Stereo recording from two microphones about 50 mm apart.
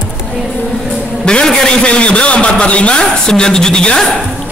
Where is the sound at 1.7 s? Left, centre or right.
Left.